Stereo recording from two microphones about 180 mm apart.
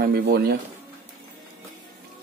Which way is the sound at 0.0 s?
60° right (ahead or behind).